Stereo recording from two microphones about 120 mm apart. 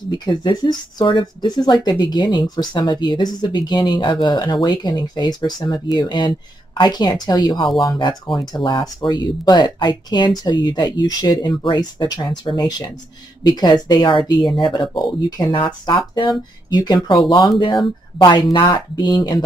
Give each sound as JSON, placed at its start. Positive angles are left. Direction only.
{"t": 0.4, "sound": "speech", "side_deg": 35}
{"t": 15.5, "sound": "speech", "side_deg": 45}